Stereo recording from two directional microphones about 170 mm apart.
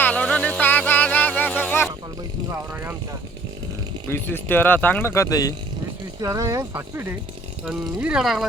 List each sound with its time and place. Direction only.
0.0 s a sound: 10° left (ahead or behind)
4.1 s speech: 10° left (ahead or behind)
6.1 s speech: 20° right (ahead or behind); by 8.4 s centre (ahead or behind)